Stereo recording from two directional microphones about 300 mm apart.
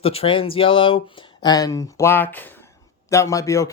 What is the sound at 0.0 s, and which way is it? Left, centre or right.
Speech, centre.